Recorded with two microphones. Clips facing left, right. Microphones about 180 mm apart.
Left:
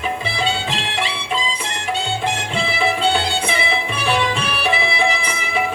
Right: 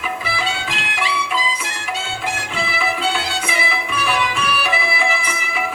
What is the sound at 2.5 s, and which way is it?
Music, 30° left (ahead or behind).